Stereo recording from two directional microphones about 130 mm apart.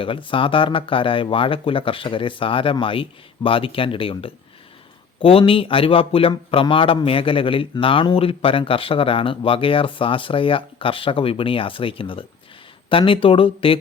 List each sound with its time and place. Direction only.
0.0 s a man's voice: 40° left (ahead or behind)